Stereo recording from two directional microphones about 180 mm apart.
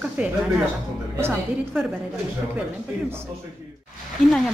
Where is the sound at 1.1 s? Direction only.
15° right (ahead or behind).